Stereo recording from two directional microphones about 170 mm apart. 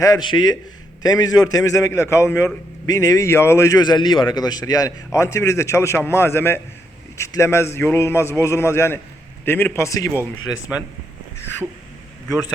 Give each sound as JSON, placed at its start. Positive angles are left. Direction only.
{"t": 0.0, "sound": "a man's voice", "side_deg": 25}